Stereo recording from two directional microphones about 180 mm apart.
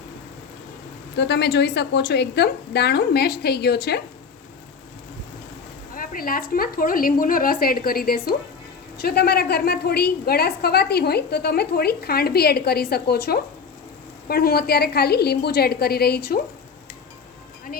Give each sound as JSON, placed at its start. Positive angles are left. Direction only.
{"t": 1.1, "sound": "a woman's voice", "side_deg": 75}
{"t": 5.9, "sound": "a woman's voice", "side_deg": 50}